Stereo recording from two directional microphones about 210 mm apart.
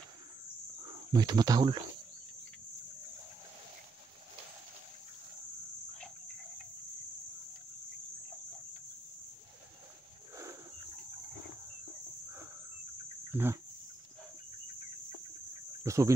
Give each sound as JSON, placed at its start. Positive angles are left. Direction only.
{"t": 1.1, "sound": "speech", "side_deg": -20}
{"t": 13.3, "sound": "a sound", "side_deg": -10}
{"t": 15.8, "sound": "insect", "side_deg": -15}